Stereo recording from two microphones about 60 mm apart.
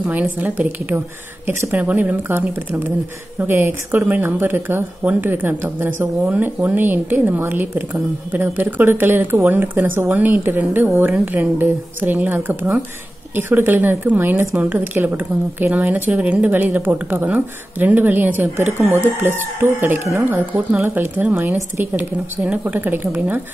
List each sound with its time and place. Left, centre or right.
0.0 s a woman's voice: right
20.0 s speech: right
20.2 s a woman's voice: right